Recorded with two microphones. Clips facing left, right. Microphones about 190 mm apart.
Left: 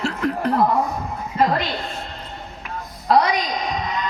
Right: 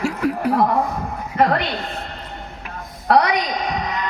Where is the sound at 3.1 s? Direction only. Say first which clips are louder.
Right 1 dB; 60° right (ahead or behind).